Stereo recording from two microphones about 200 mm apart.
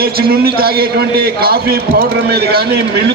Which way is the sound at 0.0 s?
50° right (ahead or behind).